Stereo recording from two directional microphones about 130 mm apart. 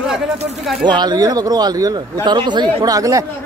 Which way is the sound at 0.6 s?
Centre (ahead or behind).